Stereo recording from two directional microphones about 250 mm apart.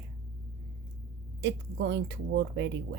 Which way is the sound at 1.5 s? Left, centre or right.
Right.